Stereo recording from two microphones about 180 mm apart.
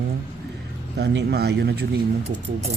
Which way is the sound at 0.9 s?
70° right (ahead or behind).